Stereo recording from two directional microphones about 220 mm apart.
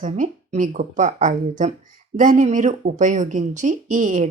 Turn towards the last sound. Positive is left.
turn(degrees=-35)  # may be behind; listen again after turning